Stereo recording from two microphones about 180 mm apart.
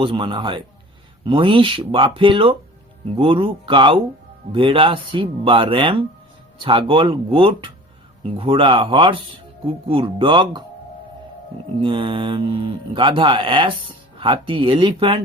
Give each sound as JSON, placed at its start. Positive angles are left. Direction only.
{"t": 0.0, "sound": "speech", "side_deg": -30}
{"t": 11.8, "sound": "speech", "side_deg": -30}